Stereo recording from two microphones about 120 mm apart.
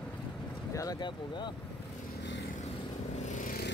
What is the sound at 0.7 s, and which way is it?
Speech, 30° left (ahead or behind).